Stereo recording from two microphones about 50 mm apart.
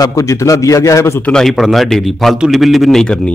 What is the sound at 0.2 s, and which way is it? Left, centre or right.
A man's voice, left.